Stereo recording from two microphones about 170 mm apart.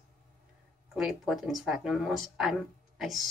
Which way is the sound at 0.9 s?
Centre (ahead or behind).